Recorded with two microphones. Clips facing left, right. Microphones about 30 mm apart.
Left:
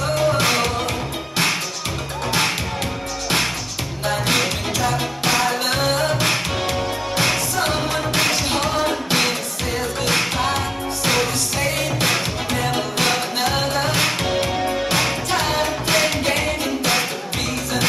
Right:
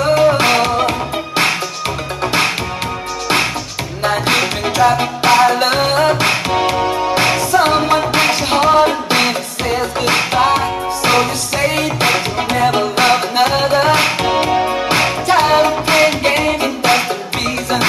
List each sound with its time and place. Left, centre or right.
0.0 s music: right
4.0 s music: right